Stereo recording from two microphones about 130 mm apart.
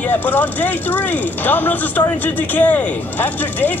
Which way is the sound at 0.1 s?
15° left (ahead or behind).